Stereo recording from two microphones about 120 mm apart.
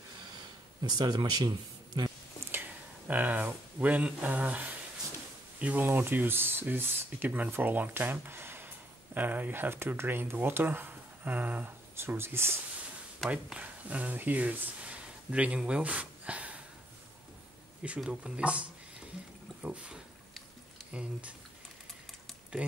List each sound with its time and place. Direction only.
0.8 s speech: 35° right (ahead or behind)
2.4 s speech: 15° right (ahead or behind)
13.2 s speech: 10° right (ahead or behind)
17.8 s speech: 10° right (ahead or behind)
19.6 s a sound: 10° right (ahead or behind)
20.9 s speech: 10° right (ahead or behind)
22.6 s speech: 10° right (ahead or behind)